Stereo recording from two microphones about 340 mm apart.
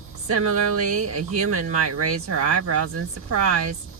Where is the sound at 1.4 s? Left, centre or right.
Right.